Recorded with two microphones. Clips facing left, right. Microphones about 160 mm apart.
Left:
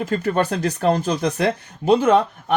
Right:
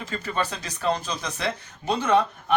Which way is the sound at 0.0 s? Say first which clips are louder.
Left 8 dB; 55° left (ahead or behind).